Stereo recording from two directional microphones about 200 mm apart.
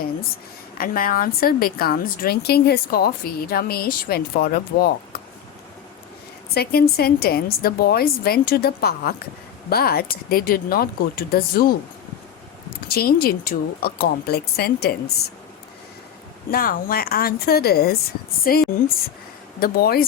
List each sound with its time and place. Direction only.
0.8 s a woman's voice: 45° left (ahead or behind)
6.5 s a woman's voice: 50° left (ahead or behind)
12.9 s a woman's voice: 50° left (ahead or behind)
16.5 s a woman's voice: 45° left (ahead or behind)